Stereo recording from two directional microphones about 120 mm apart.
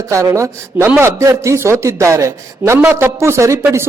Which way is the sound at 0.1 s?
25° right (ahead or behind).